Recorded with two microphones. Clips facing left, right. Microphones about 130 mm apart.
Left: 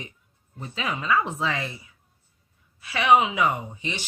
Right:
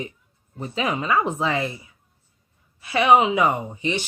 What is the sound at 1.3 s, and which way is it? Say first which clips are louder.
Speech: right 4 dB; 15° right (ahead or behind).